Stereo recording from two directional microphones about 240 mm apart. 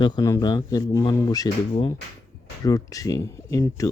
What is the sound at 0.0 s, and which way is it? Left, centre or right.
Speech, centre.